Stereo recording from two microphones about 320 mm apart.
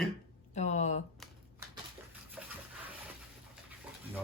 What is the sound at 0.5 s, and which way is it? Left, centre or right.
Speech, left.